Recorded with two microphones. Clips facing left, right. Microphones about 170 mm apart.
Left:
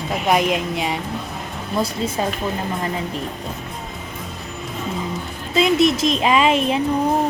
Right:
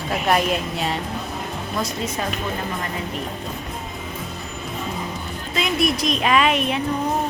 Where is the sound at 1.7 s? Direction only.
30° left (ahead or behind).